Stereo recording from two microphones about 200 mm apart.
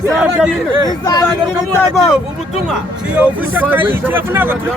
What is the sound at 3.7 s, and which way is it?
Speech, 10° right (ahead or behind).